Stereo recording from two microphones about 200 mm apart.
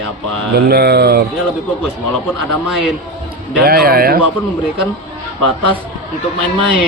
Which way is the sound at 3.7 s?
50° right (ahead or behind).